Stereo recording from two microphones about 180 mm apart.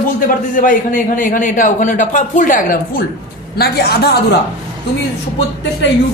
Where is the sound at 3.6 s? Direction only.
65° left (ahead or behind).